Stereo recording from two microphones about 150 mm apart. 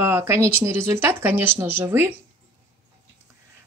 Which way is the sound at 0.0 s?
15° right (ahead or behind).